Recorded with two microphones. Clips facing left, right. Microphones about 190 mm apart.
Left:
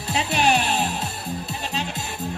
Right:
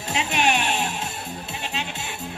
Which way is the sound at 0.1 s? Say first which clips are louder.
Left 2 dB; 35° left (ahead or behind).